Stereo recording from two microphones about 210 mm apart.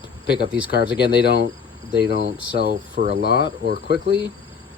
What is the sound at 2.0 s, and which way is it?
Speech, 50° right (ahead or behind).